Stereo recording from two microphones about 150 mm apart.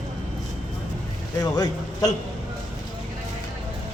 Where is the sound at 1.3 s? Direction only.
25° left (ahead or behind).